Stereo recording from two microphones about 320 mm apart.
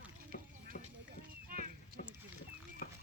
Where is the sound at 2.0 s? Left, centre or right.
Left.